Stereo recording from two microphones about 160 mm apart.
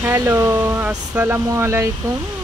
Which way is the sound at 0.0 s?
10° right (ahead or behind).